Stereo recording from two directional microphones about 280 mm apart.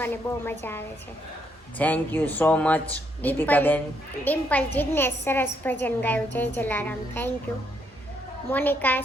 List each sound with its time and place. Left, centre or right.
0.0 s a woman's voice: centre
8.4 s a woman's voice: centre